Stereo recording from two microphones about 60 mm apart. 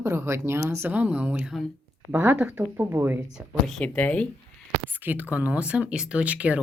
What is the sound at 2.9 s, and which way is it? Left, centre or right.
Speech, right.